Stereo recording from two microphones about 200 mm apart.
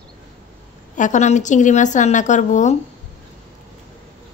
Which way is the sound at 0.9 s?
40° left (ahead or behind).